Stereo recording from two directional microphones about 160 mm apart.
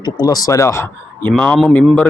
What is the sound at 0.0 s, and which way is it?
Speech, 25° left (ahead or behind).